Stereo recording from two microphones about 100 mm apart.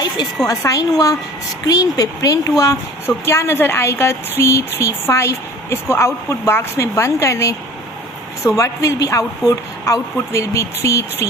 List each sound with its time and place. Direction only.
0.4 s speech: 35° left (ahead or behind)